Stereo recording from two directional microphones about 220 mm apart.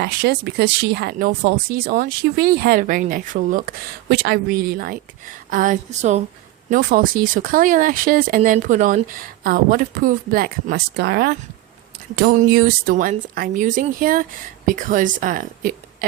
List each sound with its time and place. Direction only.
0.0 s speech: 50° right (ahead or behind)